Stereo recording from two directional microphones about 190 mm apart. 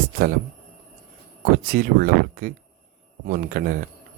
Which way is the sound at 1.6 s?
50° right (ahead or behind).